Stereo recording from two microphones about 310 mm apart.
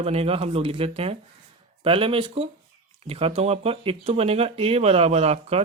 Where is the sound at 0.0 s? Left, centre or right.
Centre.